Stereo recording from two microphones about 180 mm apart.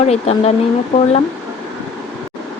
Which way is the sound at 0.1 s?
35° left (ahead or behind).